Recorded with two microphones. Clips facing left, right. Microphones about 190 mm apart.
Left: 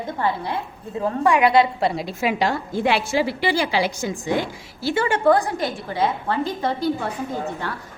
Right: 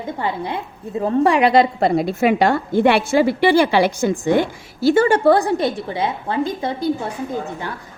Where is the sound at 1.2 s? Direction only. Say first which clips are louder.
Right 1 dB; 30° right (ahead or behind).